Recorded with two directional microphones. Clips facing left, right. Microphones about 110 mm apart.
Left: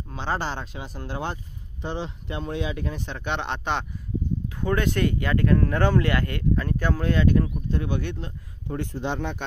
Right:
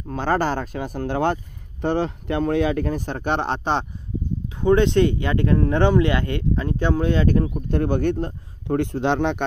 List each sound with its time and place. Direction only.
0.1 s speech: 45° right (ahead or behind)
4.6 s speech: 25° right (ahead or behind)
7.7 s speech: 50° right (ahead or behind); by 9.4 s 85° right